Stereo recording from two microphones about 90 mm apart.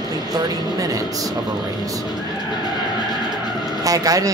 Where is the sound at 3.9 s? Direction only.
40° right (ahead or behind).